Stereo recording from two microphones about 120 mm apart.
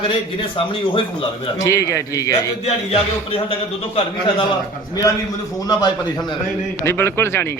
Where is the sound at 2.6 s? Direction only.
50° left (ahead or behind).